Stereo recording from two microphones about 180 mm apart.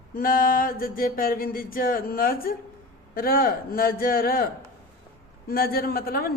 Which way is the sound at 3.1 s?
55° left (ahead or behind).